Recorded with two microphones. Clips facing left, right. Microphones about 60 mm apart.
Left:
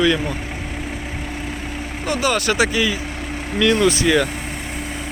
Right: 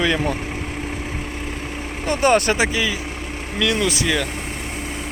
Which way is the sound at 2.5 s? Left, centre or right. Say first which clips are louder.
Left 2 dB; centre.